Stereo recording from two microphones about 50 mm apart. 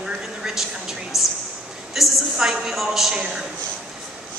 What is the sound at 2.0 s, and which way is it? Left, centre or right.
A woman's voice, centre.